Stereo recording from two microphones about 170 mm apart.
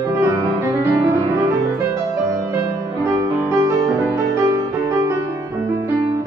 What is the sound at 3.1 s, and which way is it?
Music, 20° right (ahead or behind).